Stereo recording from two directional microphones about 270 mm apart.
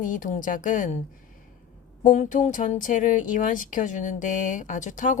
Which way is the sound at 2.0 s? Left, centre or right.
Left.